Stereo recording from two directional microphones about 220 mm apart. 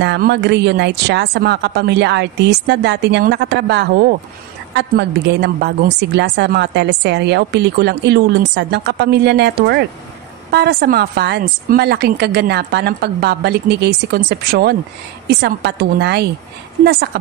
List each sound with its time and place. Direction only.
0.0 s a woman's voice: 50° right (ahead or behind)